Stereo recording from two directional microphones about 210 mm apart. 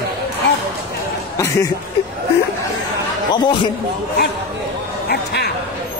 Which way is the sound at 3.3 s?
20° left (ahead or behind).